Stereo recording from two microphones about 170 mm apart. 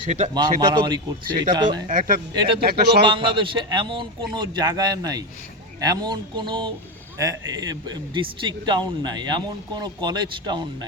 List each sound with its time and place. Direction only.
0.6 s a man's voice: 25° right (ahead or behind)
1.9 s speech: 55° right (ahead or behind)
2.3 s a man's voice: 30° right (ahead or behind)
2.6 s speech: 65° right (ahead or behind)
3.0 s a man's voice: 30° right (ahead or behind)